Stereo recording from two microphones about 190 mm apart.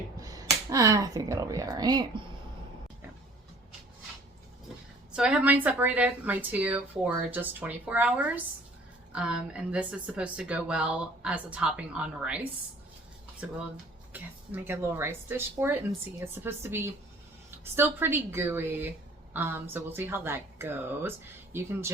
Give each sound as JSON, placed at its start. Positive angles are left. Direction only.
{"t": 0.2, "sound": "speech", "side_deg": -20}
{"t": 5.1, "sound": "a woman's voice", "side_deg": -5}
{"t": 14.1, "sound": "a woman's voice", "side_deg": -10}